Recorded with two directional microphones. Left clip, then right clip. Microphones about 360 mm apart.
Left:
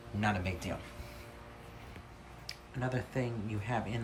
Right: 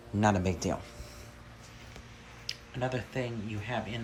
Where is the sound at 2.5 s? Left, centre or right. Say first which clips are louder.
Right 5 dB; centre.